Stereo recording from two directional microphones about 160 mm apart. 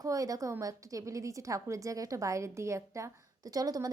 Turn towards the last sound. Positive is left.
turn(degrees=-25)  # may be behind; listen again after turning